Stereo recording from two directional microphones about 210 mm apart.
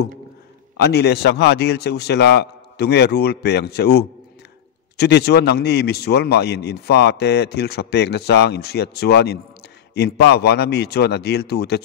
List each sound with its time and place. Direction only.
0.8 s a man's voice: 50° left (ahead or behind)